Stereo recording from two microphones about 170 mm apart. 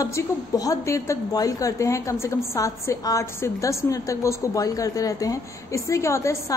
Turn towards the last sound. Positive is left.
turn(degrees=15)  # may be behind; listen again after turning